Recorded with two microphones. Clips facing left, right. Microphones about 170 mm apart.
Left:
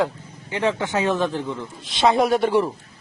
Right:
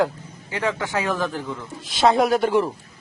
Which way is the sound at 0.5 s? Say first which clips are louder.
Left 2 dB; 25° left (ahead or behind).